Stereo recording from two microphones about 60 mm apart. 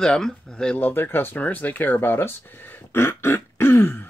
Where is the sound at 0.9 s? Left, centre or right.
Left.